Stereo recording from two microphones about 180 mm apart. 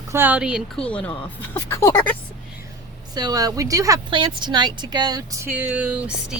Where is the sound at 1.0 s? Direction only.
10° left (ahead or behind).